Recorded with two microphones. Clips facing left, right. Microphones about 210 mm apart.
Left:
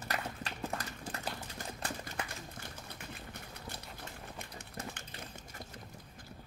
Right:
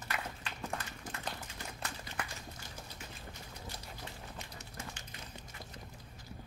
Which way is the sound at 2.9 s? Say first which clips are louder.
Left 2 dB; 60° left (ahead or behind).